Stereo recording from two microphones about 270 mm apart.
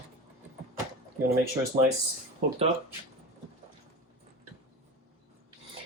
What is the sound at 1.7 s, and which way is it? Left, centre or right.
Speech, right.